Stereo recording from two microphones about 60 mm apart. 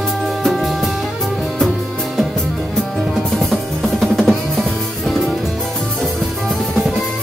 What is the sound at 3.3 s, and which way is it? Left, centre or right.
Music, centre.